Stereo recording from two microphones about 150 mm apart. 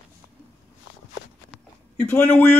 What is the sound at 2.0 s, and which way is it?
Speech, 10° left (ahead or behind).